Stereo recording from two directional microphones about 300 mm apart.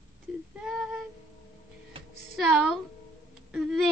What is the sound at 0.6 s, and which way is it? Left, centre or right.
Child singing, centre.